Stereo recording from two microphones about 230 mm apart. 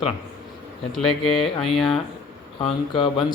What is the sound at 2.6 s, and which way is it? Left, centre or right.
Speech, left.